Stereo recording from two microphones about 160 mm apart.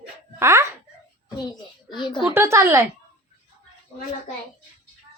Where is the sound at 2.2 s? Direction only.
15° right (ahead or behind).